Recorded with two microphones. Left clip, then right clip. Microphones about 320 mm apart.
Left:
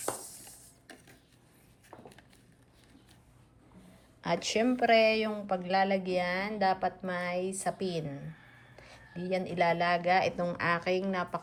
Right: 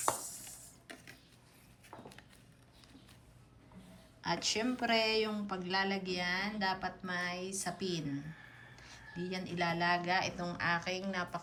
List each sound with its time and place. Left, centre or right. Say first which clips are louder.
4.2 s speech: left 5 dB; left